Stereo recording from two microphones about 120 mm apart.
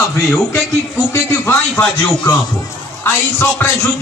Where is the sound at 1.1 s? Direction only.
20° left (ahead or behind).